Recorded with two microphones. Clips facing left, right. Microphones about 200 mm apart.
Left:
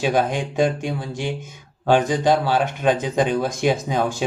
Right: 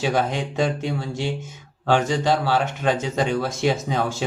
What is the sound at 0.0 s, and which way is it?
Speech, 15° left (ahead or behind).